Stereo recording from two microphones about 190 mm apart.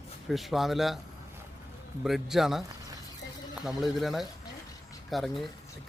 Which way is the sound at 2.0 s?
Centre (ahead or behind).